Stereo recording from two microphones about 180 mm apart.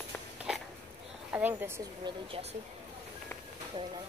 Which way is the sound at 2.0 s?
30° right (ahead or behind).